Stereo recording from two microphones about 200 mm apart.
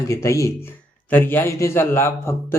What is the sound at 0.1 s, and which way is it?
A man's voice, 15° left (ahead or behind).